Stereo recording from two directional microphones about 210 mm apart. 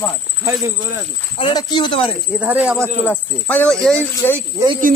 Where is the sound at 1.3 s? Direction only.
20° left (ahead or behind).